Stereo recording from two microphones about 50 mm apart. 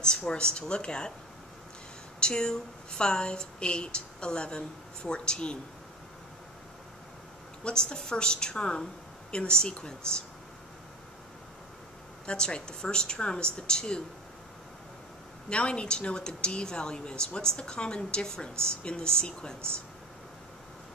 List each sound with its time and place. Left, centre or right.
0.3 s speech: centre
2.1 s speech: centre
7.6 s speech: centre
12.3 s speech: centre
15.5 s speech: left